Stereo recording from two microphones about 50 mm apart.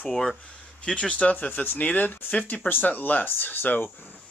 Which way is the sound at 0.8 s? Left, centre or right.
Left.